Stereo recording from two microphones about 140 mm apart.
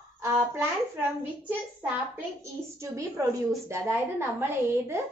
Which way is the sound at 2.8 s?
20° right (ahead or behind).